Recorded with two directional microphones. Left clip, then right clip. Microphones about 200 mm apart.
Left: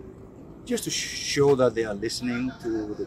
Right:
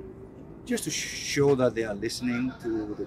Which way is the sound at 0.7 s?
15° right (ahead or behind).